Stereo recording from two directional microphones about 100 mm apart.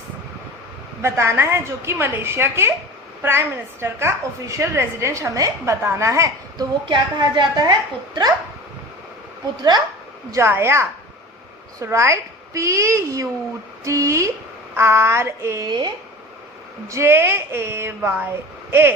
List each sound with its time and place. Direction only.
1.0 s a woman's voice: 25° right (ahead or behind)
6.6 s a woman's voice: 50° right (ahead or behind)
9.6 s a woman's voice: 45° right (ahead or behind)
10.3 s a woman's voice: 25° right (ahead or behind)
15.6 s a woman's voice: 50° right (ahead or behind)
16.9 s a woman's voice: 25° right (ahead or behind)